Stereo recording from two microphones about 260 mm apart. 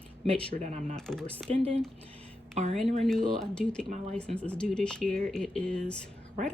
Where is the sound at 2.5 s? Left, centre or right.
Right.